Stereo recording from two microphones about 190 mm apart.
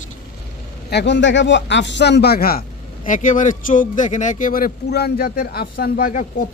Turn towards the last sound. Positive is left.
turn(degrees=45)  # may be behind; listen again after turning